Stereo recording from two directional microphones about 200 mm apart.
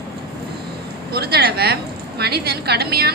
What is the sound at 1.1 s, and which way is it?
A woman's voice, 50° right (ahead or behind).